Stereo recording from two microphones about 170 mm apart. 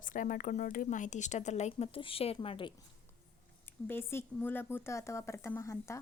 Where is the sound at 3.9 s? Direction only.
15° left (ahead or behind).